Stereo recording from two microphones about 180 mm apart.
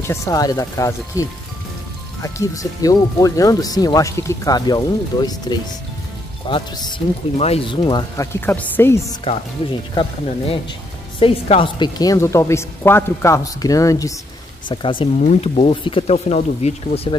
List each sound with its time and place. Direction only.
0.0 s speech: 15° left (ahead or behind)
2.2 s speech: 20° left (ahead or behind); by 7.8 s 35° left (ahead or behind)
7.8 s speech: 20° left (ahead or behind)
9.3 s speech: 30° left (ahead or behind)